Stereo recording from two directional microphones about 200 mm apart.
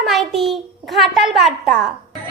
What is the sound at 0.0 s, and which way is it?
A child's voice, centre (ahead or behind).